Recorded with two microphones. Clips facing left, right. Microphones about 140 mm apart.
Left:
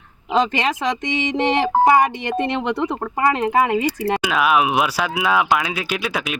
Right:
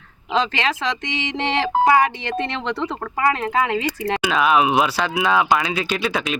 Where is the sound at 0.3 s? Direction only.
15° left (ahead or behind).